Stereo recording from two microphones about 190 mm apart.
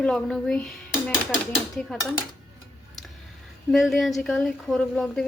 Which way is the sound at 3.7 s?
Centre (ahead or behind).